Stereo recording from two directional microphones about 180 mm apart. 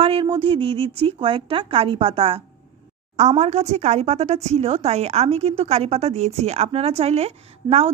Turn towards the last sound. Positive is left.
turn(degrees=-35)  # may be behind; listen again after turning